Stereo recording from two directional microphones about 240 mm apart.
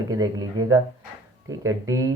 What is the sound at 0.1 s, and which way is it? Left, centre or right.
Speech, centre.